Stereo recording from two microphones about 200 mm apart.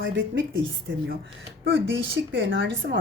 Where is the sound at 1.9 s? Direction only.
70° right (ahead or behind).